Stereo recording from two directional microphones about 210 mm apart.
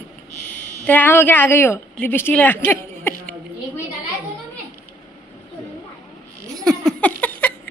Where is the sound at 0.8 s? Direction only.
10° left (ahead or behind).